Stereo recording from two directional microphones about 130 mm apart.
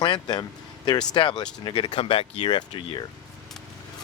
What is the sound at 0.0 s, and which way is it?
Speech, 35° left (ahead or behind).